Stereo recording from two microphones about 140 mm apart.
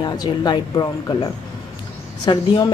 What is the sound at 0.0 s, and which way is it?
Speech, 30° left (ahead or behind).